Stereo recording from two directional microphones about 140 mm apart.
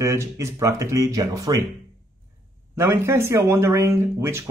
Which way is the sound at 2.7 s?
15° right (ahead or behind).